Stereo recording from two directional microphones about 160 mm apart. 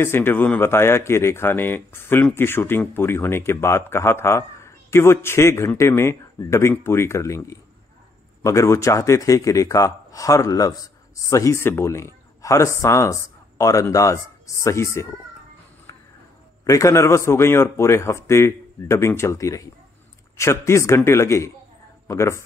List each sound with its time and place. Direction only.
0.0 s a man's voice: 15° left (ahead or behind)
16.6 s speech: 20° left (ahead or behind)